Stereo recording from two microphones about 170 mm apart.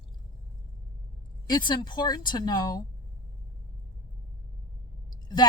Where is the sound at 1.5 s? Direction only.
25° left (ahead or behind).